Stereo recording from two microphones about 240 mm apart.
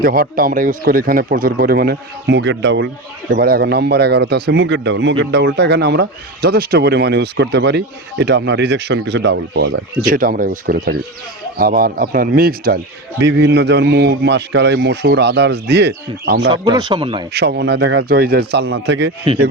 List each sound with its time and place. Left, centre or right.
0.0 s a man's voice: right
16.5 s speech: centre
17.3 s speech: right